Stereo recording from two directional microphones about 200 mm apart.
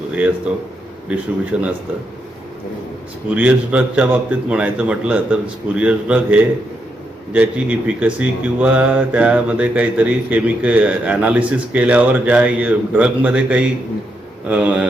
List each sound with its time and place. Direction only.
0.5 s a man's voice: 5° right (ahead or behind)
3.2 s a man's voice: 5° right (ahead or behind)